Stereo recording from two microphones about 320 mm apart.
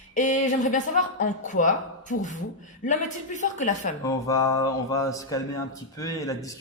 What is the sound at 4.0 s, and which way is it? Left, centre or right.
A man's voice, centre.